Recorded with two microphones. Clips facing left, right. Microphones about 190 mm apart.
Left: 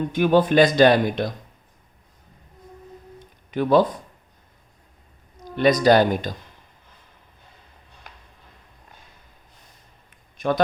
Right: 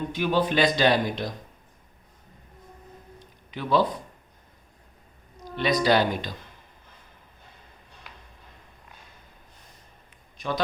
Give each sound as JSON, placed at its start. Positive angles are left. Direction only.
{"t": 0.1, "sound": "speech", "side_deg": 50}
{"t": 3.5, "sound": "speech", "side_deg": 50}
{"t": 5.5, "sound": "speech", "side_deg": 50}
{"t": 10.3, "sound": "a sound", "side_deg": 50}